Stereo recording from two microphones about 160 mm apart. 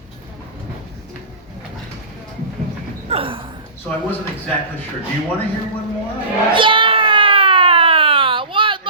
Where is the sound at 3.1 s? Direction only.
35° right (ahead or behind).